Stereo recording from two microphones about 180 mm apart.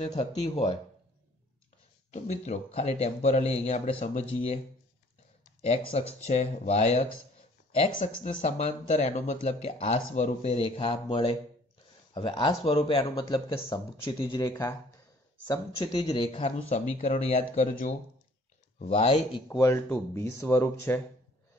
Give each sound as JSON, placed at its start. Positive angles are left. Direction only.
{"t": 0.1, "sound": "speech", "side_deg": 35}
{"t": 2.0, "sound": "speech", "side_deg": 40}
{"t": 5.9, "sound": "speech", "side_deg": 35}
{"t": 19.5, "sound": "speech", "side_deg": 20}